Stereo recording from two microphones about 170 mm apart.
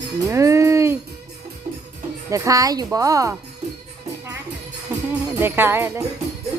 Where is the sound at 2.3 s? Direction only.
20° right (ahead or behind).